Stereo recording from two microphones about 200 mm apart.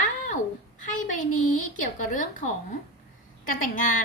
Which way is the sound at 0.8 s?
40° left (ahead or behind).